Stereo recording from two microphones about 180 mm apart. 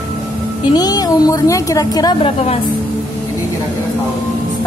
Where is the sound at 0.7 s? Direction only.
20° left (ahead or behind).